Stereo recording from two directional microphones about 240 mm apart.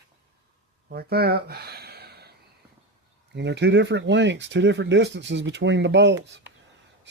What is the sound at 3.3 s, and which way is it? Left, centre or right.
Speech, right.